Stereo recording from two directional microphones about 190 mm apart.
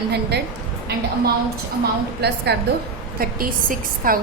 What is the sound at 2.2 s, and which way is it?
A woman's voice, 60° right (ahead or behind).